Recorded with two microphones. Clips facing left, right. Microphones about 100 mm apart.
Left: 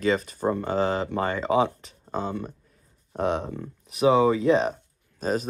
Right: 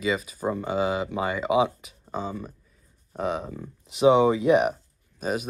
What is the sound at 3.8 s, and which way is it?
Speech, 20° right (ahead or behind).